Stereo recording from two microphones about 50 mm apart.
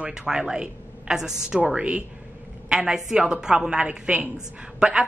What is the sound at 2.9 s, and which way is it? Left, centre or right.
A woman's voice, centre.